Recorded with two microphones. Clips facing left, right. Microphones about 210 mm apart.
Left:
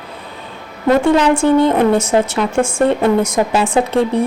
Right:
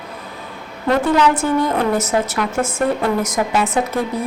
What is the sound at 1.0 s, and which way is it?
A woman's voice, 25° left (ahead or behind).